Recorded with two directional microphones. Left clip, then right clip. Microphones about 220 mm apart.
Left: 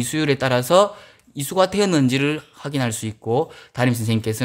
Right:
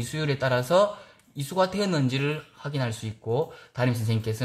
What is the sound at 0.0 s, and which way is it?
Speech, 50° left (ahead or behind).